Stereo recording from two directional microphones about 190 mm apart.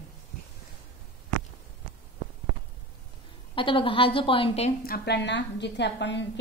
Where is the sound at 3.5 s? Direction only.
25° left (ahead or behind).